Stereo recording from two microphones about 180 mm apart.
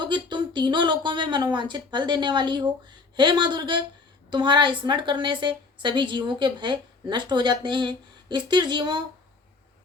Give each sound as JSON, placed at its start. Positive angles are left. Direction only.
{"t": 0.0, "sound": "a woman's voice", "side_deg": -25}